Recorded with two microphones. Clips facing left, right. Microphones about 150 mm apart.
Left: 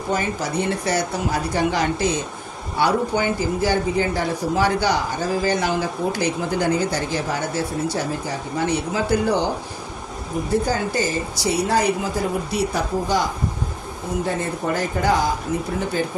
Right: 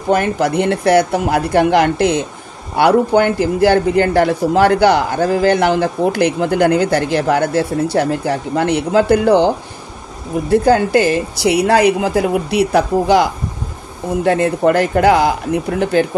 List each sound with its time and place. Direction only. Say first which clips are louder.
0.1 s a man's voice: right 9 dB; 60° right (ahead or behind)
10.5 s speech: right 10 dB; 65° right (ahead or behind)